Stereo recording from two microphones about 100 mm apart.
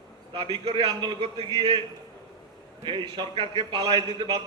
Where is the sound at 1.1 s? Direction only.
65° right (ahead or behind).